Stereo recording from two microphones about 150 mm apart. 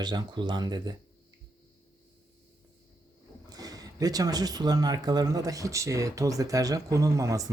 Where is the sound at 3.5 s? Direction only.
25° right (ahead or behind).